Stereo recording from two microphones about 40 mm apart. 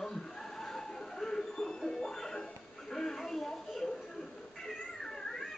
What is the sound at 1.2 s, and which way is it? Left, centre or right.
Music, centre.